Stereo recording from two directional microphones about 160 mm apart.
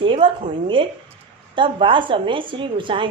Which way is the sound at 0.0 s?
30° right (ahead or behind).